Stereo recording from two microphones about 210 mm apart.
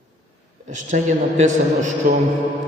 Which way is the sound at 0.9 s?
35° right (ahead or behind).